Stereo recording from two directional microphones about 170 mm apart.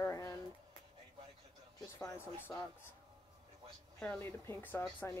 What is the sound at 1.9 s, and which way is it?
Speech, 15° left (ahead or behind).